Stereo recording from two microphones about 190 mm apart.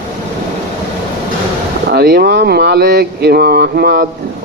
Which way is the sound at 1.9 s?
60° right (ahead or behind).